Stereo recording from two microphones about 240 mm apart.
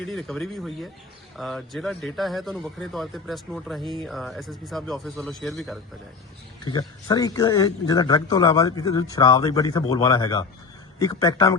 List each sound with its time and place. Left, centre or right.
0.0 s speech: centre
6.7 s speech: centre